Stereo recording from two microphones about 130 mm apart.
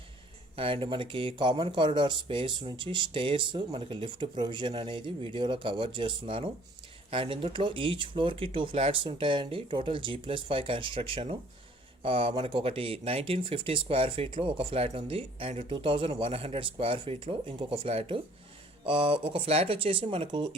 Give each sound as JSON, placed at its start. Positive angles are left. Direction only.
{"t": 0.5, "sound": "speech", "side_deg": -45}